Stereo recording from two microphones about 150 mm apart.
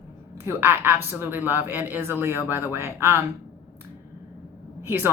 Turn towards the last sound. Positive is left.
turn(degrees=-15)  # may be behind; listen again after turning